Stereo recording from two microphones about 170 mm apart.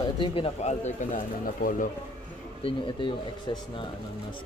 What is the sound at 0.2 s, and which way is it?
Speech, 35° left (ahead or behind).